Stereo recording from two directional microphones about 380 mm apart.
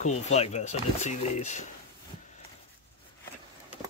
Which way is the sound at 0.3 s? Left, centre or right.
Centre.